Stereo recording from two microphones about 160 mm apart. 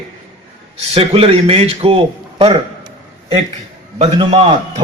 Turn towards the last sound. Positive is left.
turn(degrees=-30)  # may be behind; listen again after turning